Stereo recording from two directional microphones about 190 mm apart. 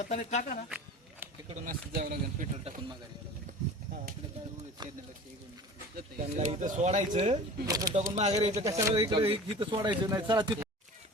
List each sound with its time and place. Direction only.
0.0 s speech: 35° left (ahead or behind)
1.2 s a sound: 10° right (ahead or behind)
1.6 s speech: 50° right (ahead or behind)
4.8 s speech: 20° right (ahead or behind)
6.3 s speech: 40° right (ahead or behind)
7.7 s speech: 20° right (ahead or behind)
8.1 s speech: 35° right (ahead or behind)
8.6 s speech: 15° right (ahead or behind)